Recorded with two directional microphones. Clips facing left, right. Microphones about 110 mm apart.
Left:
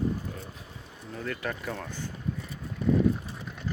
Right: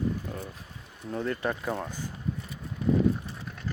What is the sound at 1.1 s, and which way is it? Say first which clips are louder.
Speech: right 4 dB; 30° right (ahead or behind).